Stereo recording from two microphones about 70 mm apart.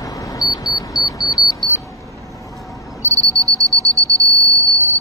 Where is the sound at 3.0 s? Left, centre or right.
Right.